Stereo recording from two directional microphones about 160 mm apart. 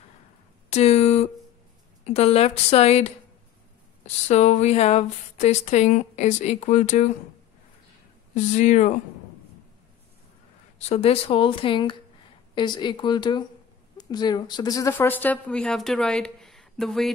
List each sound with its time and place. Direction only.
0.7 s a sound: 45° left (ahead or behind)
2.0 s speech: 40° left (ahead or behind)
4.0 s a woman's voice: 45° left (ahead or behind)
8.4 s a woman's voice: 50° left (ahead or behind)
10.8 s a woman's voice: 40° left (ahead or behind); by 14.9 s 25° left (ahead or behind)
14.9 s speech: 10° left (ahead or behind)